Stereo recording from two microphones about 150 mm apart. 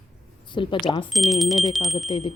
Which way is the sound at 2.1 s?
35° left (ahead or behind).